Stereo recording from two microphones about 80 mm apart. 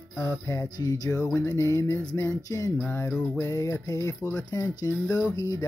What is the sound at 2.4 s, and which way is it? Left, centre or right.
Speech, left.